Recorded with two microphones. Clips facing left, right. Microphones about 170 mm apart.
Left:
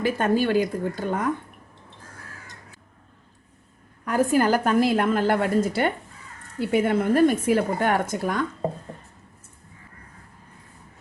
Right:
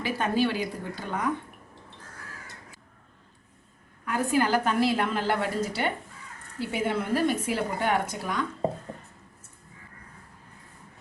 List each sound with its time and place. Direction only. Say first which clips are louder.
0.0 s a woman's voice: left 4 dB; 50° left (ahead or behind)
4.0 s a woman's voice: left 5 dB; 40° left (ahead or behind)